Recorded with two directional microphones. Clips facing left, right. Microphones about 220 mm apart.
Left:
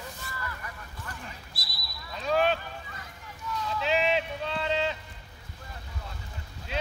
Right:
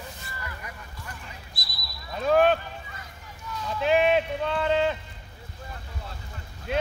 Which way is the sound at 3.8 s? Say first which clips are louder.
Right 6 dB; 55° right (ahead or behind).